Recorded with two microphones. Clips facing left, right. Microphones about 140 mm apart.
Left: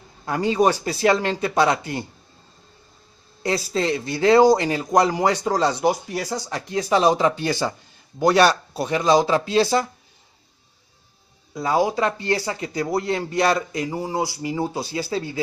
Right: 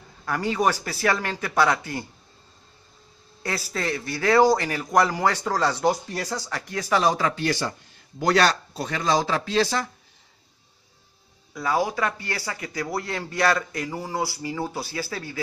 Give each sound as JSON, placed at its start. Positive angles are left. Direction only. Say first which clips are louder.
{"t": 0.2, "sound": "speech", "louder": "left 4 dB", "side_deg": 20}
{"t": 3.4, "sound": "speech", "louder": "left 6 dB", "side_deg": 20}
{"t": 11.5, "sound": "speech", "louder": "left 4 dB", "side_deg": 25}